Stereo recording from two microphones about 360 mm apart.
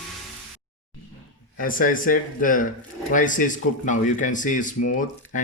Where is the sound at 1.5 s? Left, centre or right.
Left.